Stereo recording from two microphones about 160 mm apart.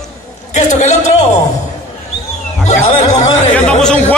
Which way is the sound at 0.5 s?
45° left (ahead or behind).